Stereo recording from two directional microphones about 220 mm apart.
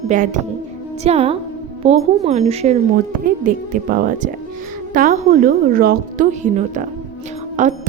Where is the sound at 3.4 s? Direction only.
40° right (ahead or behind).